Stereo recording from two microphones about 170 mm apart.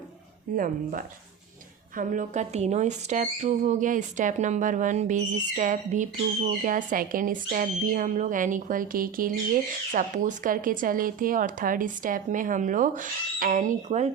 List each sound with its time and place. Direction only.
0.5 s speech: 50° right (ahead or behind)